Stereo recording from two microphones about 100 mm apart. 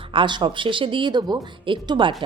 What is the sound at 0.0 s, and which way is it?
A woman's voice, 60° right (ahead or behind).